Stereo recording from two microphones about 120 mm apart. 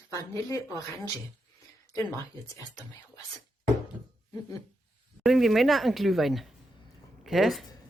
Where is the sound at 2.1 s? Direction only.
30° left (ahead or behind).